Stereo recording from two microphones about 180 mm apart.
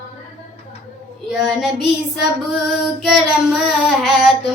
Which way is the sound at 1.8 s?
70° left (ahead or behind).